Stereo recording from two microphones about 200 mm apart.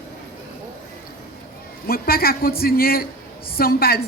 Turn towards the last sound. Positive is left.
turn(degrees=50)  # may be behind; listen again after turning